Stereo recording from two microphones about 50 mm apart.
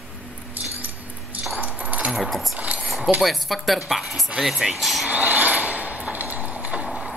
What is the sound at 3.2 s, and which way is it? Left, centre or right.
Speech, centre.